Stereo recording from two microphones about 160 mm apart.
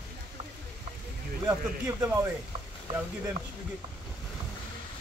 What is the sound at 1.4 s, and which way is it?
Speech, 15° right (ahead or behind).